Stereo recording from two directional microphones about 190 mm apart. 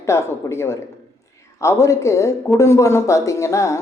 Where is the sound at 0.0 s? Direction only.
15° left (ahead or behind).